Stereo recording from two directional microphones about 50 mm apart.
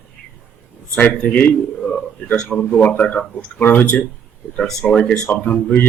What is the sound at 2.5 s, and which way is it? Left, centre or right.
A man's voice, left.